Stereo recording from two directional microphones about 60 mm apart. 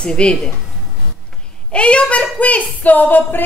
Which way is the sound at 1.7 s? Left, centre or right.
Centre.